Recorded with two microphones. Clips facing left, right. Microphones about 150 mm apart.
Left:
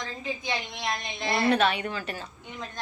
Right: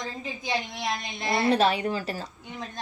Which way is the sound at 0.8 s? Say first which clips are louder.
Right 1 dB; centre (ahead or behind).